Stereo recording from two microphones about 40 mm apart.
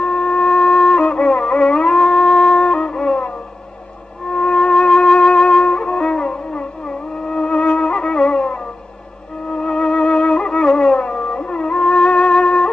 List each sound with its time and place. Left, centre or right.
0.0 s music: centre
2.0 s music: centre
4.3 s music: centre
4.6 s flute: centre
5.4 s music: centre